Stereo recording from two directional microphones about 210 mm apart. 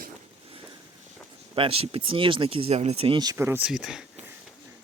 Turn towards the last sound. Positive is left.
turn(degrees=0)  # may be behind; listen again after turning